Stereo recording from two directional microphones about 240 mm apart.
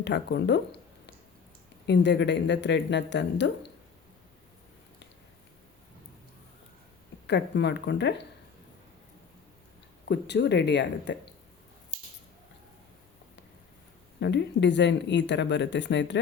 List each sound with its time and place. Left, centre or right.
0.0 s speech: left
7.3 s speech: left
10.1 s speech: left
14.2 s speech: left